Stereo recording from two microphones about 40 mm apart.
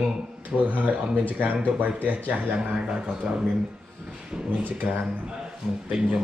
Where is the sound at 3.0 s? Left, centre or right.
Centre.